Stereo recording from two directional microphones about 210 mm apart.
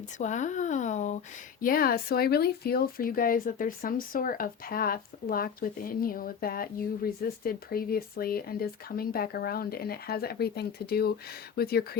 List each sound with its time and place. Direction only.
0.2 s speech: 35° left (ahead or behind)